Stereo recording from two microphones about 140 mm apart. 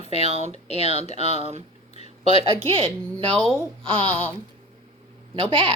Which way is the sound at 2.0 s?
45° left (ahead or behind).